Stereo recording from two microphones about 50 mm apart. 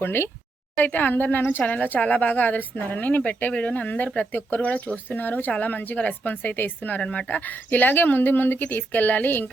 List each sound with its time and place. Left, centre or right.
0.0 s speech: left
0.8 s speech: left